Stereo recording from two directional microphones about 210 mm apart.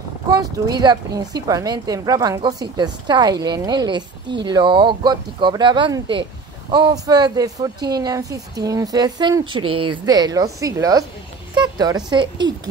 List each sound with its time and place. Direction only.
0.3 s a woman's voice: 20° right (ahead or behind)